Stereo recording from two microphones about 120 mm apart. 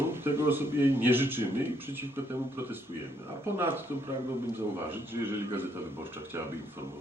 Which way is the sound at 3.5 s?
20° right (ahead or behind).